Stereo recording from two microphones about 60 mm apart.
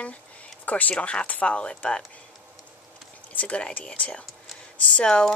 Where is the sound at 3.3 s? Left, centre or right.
Left.